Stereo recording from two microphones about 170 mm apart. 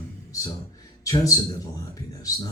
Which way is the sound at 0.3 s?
20° left (ahead or behind).